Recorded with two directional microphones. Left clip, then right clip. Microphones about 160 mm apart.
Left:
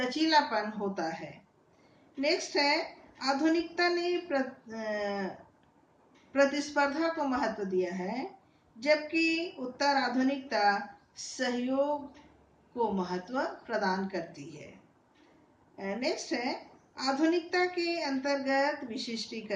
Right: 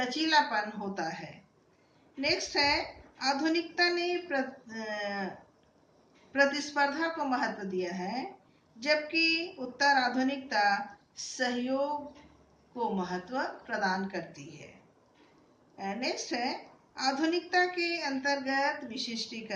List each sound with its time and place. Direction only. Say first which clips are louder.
0.0 s a woman's voice: even; 15° right (ahead or behind)
6.3 s a woman's voice: even; 15° right (ahead or behind)
15.7 s a woman's voice: left 1 dB; 15° right (ahead or behind)